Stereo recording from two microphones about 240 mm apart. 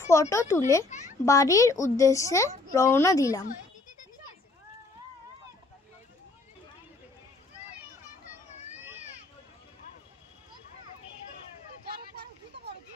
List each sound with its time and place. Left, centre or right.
0.0 s speech: centre
0.8 s a sound: left
1.2 s speech: centre